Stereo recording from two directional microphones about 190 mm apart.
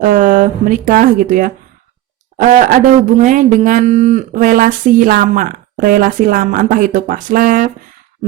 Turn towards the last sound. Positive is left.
turn(degrees=-45)  # may be behind; listen again after turning